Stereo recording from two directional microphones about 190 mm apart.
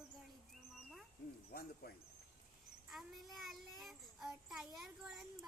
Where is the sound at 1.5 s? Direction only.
50° left (ahead or behind).